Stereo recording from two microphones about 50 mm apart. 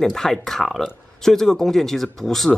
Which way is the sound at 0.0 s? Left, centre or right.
Centre.